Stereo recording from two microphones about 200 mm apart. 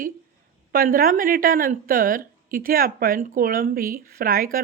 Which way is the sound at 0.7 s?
45° right (ahead or behind).